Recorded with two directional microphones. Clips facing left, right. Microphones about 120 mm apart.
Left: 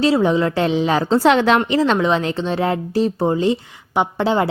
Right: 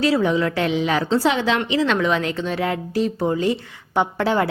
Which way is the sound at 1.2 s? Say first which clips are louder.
Left 6 dB; 60° left (ahead or behind).